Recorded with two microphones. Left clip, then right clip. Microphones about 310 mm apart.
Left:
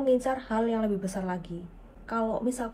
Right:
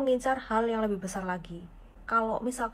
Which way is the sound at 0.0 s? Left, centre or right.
Centre.